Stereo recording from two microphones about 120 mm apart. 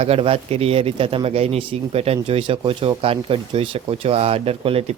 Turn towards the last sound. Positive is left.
turn(degrees=-55)  # may be behind; listen again after turning